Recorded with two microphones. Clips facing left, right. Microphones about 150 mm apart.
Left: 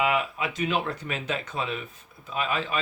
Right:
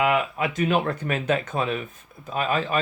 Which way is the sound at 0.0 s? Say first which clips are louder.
Right 3 dB; 55° right (ahead or behind).